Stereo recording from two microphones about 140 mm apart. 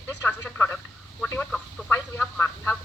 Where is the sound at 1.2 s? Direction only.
10° left (ahead or behind).